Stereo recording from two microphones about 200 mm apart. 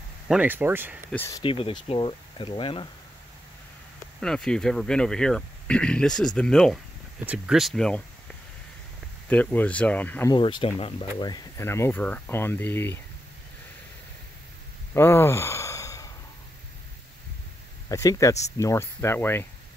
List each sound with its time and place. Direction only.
0.3 s speech: 10° right (ahead or behind)
1.1 s speech: 10° left (ahead or behind)
1.4 s speech: 25° left (ahead or behind)
4.2 s speech: 5° left (ahead or behind)
9.3 s speech: 5° left (ahead or behind)
10.3 s speech: 25° left (ahead or behind)
15.0 s a sound: 10° left (ahead or behind)
17.8 s speech: 15° left (ahead or behind)